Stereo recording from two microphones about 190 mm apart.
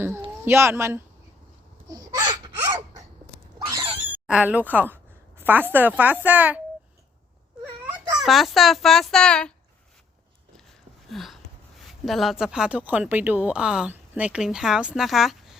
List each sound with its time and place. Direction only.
0.4 s a woman's voice: 15° right (ahead or behind)
1.9 s a sound: 20° right (ahead or behind)
4.3 s a woman's voice: 5° right (ahead or behind)
7.6 s speech: 5° right (ahead or behind)
11.1 s a sound: centre (ahead or behind)
12.0 s speech: centre (ahead or behind)